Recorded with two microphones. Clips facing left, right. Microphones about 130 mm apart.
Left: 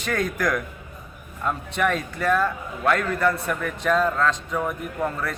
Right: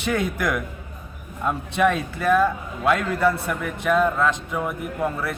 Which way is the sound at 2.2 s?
5° right (ahead or behind).